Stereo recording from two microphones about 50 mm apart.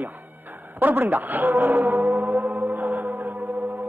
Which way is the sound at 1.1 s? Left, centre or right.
Right.